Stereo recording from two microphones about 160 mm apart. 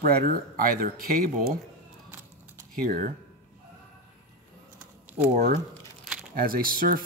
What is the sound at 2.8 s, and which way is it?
Speech, 60° right (ahead or behind).